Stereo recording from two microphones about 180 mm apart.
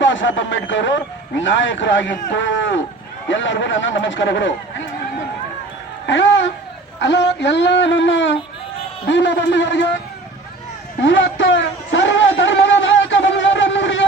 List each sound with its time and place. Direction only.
0.0 s speech: 90° left
6.1 s speech: 90° left
7.0 s a man's voice: 75° left (ahead or behind)
11.0 s a sound: 90° left